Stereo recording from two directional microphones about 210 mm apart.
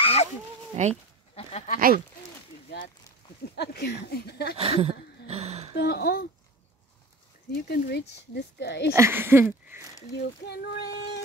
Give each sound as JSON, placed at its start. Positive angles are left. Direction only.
{"t": 0.0, "sound": "chicken", "side_deg": 30}
{"t": 0.8, "sound": "speech", "side_deg": -35}
{"t": 1.3, "sound": "speech", "side_deg": 30}
{"t": 3.5, "sound": "speech", "side_deg": 50}
{"t": 4.6, "sound": "a sound", "side_deg": -30}
{"t": 5.8, "sound": "speech", "side_deg": 50}
{"t": 7.6, "sound": "speech", "side_deg": 50}
{"t": 8.9, "sound": "a sound", "side_deg": -10}
{"t": 10.4, "sound": "speech", "side_deg": 50}